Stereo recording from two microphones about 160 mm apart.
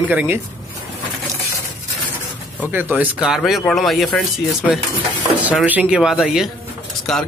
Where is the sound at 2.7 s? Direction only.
10° right (ahead or behind).